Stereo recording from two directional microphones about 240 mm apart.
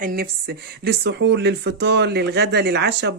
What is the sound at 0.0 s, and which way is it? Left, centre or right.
Speech, right.